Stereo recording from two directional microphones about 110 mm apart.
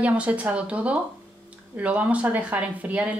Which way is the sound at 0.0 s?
10° right (ahead or behind).